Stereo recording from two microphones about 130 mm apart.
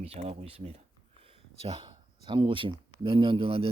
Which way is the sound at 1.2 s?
50° right (ahead or behind).